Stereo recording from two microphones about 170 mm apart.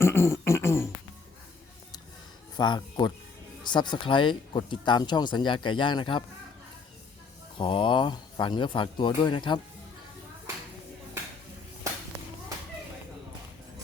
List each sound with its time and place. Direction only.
0.0 s throat clearing: 15° left (ahead or behind)
2.6 s speech: 25° left (ahead or behind)
7.6 s speech: 30° left (ahead or behind)